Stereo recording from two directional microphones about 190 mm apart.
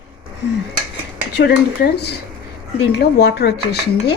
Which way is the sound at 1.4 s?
60° left (ahead or behind).